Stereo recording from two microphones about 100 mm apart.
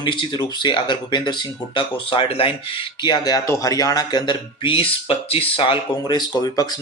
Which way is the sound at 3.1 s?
40° left (ahead or behind).